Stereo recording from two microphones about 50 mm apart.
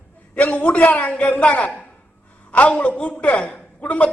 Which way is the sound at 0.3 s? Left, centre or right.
Left.